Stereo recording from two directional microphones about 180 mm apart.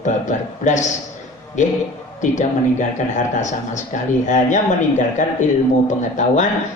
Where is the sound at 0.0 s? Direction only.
45° left (ahead or behind).